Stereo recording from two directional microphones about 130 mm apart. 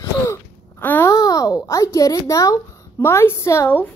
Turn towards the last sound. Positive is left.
turn(degrees=15)  # may be behind; listen again after turning